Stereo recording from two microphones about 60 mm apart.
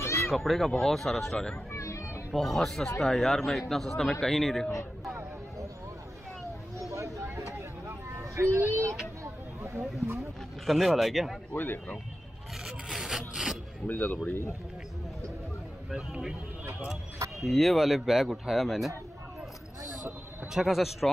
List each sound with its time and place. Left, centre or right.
0.0 s a sound: left
0.3 s a man's voice: centre
1.7 s music: left
2.3 s a man's voice: centre
6.9 s a sound: right
8.2 s speech: right
10.7 s a man's voice: centre
11.5 s speech: left
12.6 s rub: centre
13.8 s speech: left
15.9 s speech: centre
17.4 s a man's voice: centre
20.5 s a man's voice: centre